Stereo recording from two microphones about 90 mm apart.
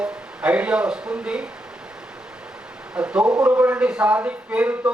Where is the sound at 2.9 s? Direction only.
10° right (ahead or behind).